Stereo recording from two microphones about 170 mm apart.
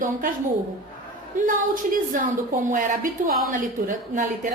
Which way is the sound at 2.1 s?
50° right (ahead or behind).